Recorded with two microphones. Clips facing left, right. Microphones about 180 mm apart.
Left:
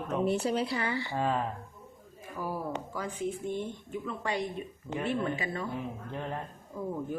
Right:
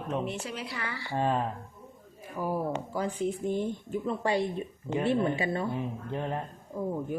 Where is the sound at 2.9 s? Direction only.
30° right (ahead or behind).